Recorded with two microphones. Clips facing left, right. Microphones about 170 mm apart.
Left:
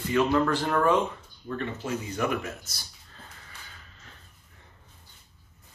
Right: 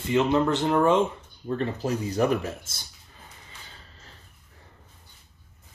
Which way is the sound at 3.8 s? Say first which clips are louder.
Right 1 dB; 35° right (ahead or behind).